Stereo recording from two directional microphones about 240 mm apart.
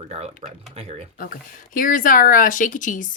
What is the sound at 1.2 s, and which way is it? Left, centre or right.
Speech, left.